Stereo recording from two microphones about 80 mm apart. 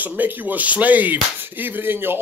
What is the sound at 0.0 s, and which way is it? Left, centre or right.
Speech, right.